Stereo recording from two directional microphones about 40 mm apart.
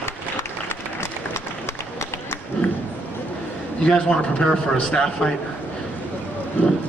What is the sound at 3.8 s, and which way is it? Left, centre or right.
A man's voice, left.